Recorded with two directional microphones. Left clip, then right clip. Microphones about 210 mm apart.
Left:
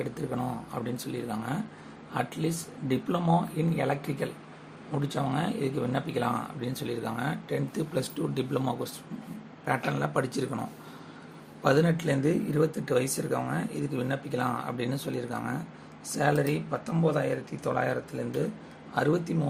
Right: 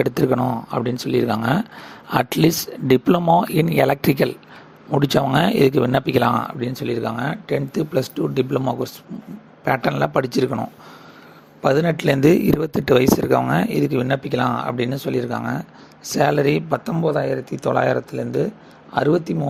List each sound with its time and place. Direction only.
0.0 s speech: 45° right (ahead or behind)